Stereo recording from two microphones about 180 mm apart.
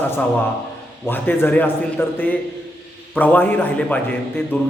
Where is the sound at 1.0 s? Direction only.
10° left (ahead or behind).